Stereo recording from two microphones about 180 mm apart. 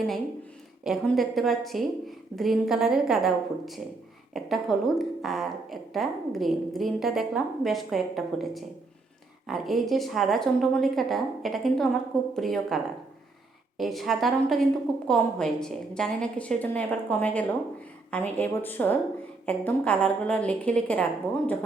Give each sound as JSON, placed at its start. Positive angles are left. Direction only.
{"t": 0.9, "sound": "a woman's voice", "side_deg": 0}